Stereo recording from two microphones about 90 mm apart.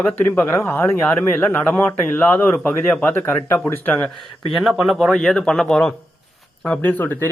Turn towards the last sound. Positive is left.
turn(degrees=20)  # may be behind; listen again after turning